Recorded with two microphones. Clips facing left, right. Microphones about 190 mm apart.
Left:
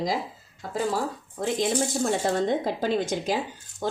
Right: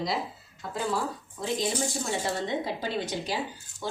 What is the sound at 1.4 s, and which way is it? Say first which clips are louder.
Speech: left 4 dB; 55° left (ahead or behind).